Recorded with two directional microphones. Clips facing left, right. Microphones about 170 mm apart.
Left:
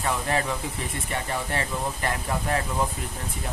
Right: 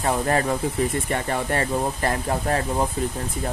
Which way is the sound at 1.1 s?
55° right (ahead or behind).